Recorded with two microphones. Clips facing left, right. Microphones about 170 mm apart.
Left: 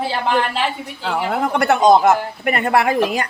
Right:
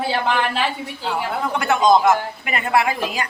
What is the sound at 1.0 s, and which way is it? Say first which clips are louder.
A man's voice: left 4 dB; 65° left (ahead or behind).